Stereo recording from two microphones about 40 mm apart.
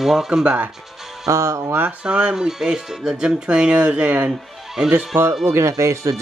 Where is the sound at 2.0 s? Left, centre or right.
Right.